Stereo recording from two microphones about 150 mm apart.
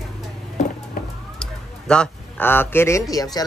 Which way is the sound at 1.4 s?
5° left (ahead or behind).